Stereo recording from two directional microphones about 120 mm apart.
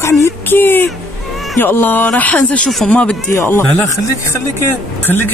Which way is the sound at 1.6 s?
15° left (ahead or behind).